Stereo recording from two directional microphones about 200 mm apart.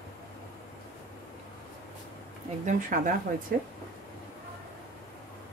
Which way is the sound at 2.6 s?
40° right (ahead or behind).